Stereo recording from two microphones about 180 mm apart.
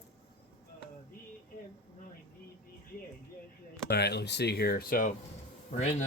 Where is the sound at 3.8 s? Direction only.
65° left (ahead or behind).